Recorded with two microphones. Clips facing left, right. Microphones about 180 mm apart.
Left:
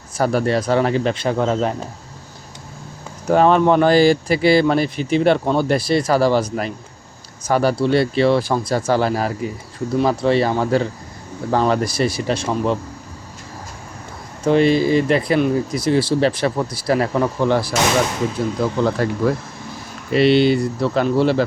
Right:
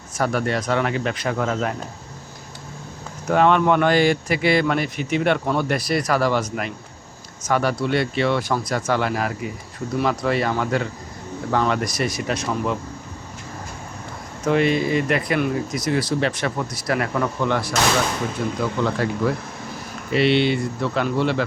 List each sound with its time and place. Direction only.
0.2 s speech: 35° left (ahead or behind)
3.2 s speech: 35° left (ahead or behind)
14.4 s speech: 30° left (ahead or behind)
20.1 s speech: 40° left (ahead or behind)